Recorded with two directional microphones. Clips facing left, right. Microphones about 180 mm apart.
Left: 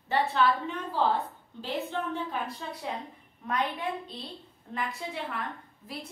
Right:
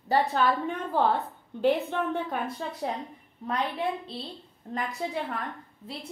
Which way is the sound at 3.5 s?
30° right (ahead or behind).